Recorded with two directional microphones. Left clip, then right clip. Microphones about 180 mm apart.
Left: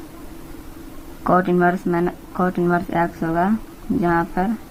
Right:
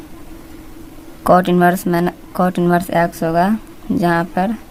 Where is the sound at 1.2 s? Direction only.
45° right (ahead or behind).